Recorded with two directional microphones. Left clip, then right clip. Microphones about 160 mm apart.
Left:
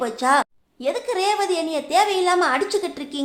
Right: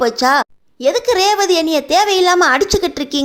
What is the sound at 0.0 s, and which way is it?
A woman's voice, 35° right (ahead or behind).